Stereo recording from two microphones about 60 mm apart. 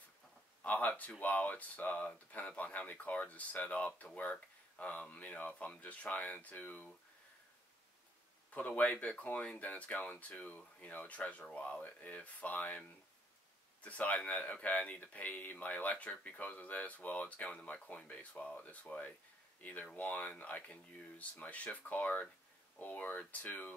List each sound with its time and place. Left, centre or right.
0.7 s speech: left
8.5 s speech: left
13.8 s speech: left